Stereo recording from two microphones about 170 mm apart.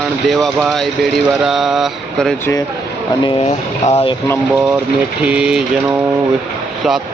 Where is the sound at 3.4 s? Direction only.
40° left (ahead or behind).